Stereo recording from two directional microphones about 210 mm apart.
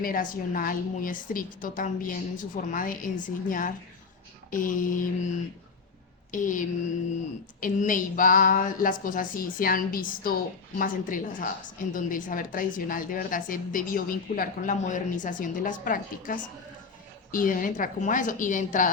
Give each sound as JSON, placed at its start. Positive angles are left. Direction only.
{"t": 0.0, "sound": "a woman's voice", "side_deg": 40}
{"t": 6.3, "sound": "a woman's voice", "side_deg": 35}